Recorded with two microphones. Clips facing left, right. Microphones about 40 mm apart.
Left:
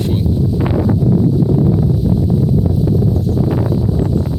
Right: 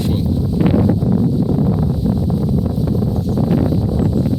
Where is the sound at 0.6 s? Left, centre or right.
Centre.